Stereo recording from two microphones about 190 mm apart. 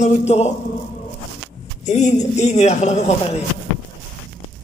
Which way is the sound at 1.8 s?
35° left (ahead or behind).